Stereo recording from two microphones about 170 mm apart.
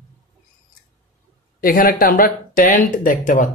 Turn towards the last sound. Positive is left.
turn(degrees=50)  # may be behind; listen again after turning